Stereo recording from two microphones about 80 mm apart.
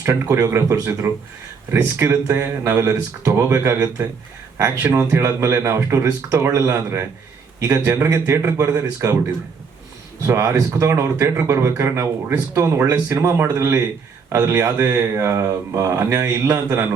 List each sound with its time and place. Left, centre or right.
0.0 s speech: right
1.0 s speech: right
2.8 s speech: right
10.2 s speech: right